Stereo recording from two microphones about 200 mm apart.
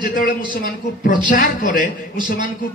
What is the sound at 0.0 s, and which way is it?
A man's voice, 40° left (ahead or behind).